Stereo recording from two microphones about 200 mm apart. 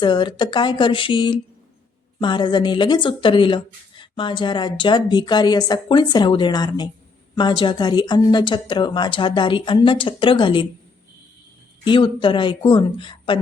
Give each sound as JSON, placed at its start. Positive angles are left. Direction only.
{"t": 0.0, "sound": "speech", "side_deg": 25}
{"t": 11.9, "sound": "speech", "side_deg": 25}